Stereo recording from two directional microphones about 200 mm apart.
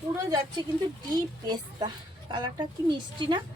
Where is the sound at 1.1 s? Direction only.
20° right (ahead or behind).